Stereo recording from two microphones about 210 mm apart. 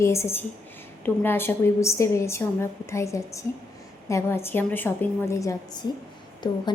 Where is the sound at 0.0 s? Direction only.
15° left (ahead or behind).